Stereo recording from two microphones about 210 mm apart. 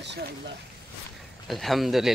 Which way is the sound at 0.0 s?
55° right (ahead or behind).